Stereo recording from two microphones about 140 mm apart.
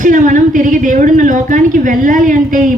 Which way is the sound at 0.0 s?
65° right (ahead or behind).